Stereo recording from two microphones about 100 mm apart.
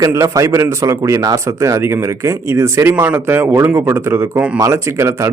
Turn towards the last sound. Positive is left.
turn(degrees=-25)  # may be behind; listen again after turning